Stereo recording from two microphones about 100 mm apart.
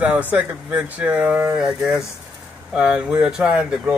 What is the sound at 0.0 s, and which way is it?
Speech, 15° right (ahead or behind).